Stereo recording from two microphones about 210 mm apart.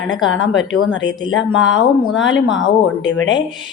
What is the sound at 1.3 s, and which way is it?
Speech, 65° left (ahead or behind).